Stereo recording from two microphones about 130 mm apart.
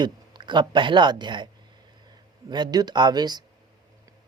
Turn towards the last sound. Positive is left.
turn(degrees=-30)  # may be behind; listen again after turning